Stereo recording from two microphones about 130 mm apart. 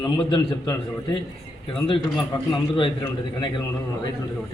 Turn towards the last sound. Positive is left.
turn(degrees=35)  # may be behind; listen again after turning